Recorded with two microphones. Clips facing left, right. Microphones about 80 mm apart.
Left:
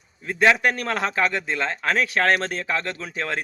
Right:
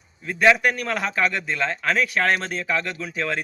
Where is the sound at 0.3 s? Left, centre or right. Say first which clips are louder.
Right 1 dB; left.